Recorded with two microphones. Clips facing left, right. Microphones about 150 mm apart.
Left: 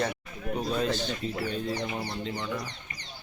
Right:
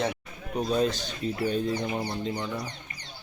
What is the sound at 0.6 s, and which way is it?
A man's voice, 15° right (ahead or behind).